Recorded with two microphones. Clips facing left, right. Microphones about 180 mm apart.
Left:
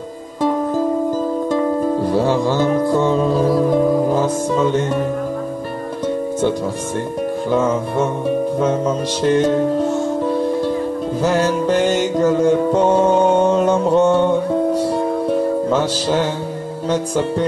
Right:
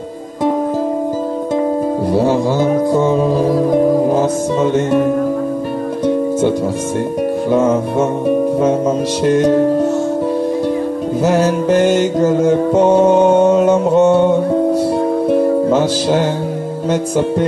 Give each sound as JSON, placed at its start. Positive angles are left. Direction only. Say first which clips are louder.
{"t": 2.2, "sound": "music", "louder": "right 3 dB", "side_deg": -15}
{"t": 9.2, "sound": "music", "louder": "right 2 dB", "side_deg": -10}
{"t": 12.7, "sound": "music", "louder": "right 4 dB", "side_deg": -20}
{"t": 13.1, "sound": "music", "louder": "right 4 dB", "side_deg": -5}